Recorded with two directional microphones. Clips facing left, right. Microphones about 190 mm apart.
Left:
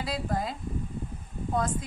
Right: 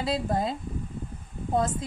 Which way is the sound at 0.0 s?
25° right (ahead or behind).